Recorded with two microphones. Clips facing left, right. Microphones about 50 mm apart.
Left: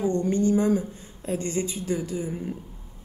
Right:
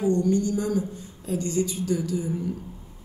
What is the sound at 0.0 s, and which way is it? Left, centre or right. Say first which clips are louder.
A woman's voice: right 1 dB; left.